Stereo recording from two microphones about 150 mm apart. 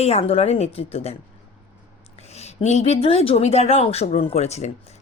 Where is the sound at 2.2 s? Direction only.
45° left (ahead or behind).